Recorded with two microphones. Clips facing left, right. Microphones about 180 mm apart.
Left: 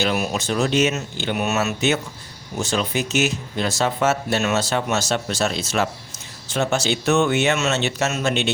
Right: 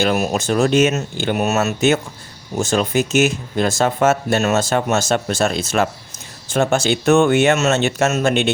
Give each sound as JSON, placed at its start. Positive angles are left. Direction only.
{"t": 0.0, "sound": "speech", "side_deg": -45}